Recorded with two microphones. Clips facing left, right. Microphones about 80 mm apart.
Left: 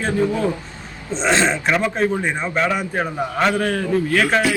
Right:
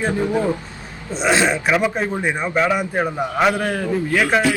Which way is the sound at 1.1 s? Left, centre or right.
Centre.